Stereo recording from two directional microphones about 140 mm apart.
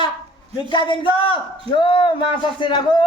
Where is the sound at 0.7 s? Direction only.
35° left (ahead or behind).